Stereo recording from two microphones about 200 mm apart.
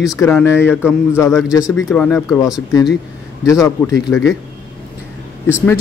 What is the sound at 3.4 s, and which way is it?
Speech, 15° left (ahead or behind).